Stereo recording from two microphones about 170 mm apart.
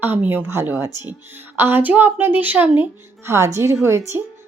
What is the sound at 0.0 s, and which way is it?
Speech, 10° right (ahead or behind).